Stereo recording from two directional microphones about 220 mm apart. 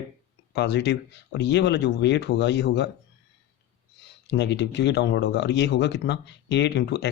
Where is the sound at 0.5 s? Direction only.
50° left (ahead or behind).